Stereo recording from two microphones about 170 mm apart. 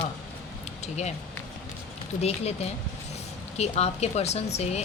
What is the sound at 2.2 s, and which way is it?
Speech, 40° left (ahead or behind).